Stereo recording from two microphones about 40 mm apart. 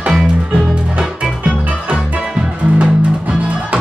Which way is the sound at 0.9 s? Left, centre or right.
Right.